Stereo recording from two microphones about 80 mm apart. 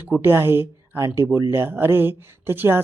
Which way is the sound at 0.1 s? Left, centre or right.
Right.